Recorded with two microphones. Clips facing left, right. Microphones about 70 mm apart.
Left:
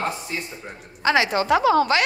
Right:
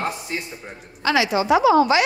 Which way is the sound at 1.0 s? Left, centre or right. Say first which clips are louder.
Even; left.